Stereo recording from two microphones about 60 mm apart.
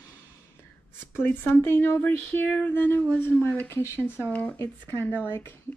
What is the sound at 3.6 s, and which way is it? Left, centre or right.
Speech, left.